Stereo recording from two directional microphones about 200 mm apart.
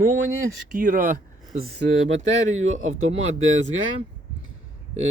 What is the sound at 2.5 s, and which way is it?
Speech, 85° right.